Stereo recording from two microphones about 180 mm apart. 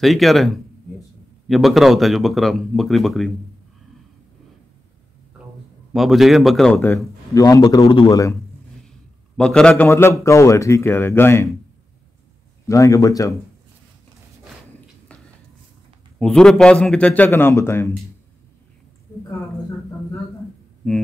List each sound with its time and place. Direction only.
0.0 s speech: centre (ahead or behind)
5.9 s a man's voice: centre (ahead or behind); by 8.2 s 25° left (ahead or behind)
9.4 s a man's voice: 5° left (ahead or behind)
12.6 s a man's voice: 15° left (ahead or behind)
16.2 s a man's voice: 5° left (ahead or behind)